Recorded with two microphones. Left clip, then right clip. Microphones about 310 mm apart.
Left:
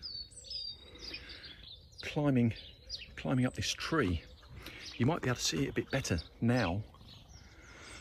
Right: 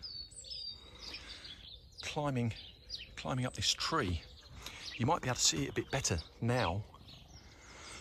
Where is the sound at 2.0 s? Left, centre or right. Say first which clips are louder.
Left 4 dB; centre.